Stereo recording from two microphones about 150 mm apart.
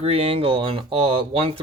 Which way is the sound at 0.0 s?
40° right (ahead or behind).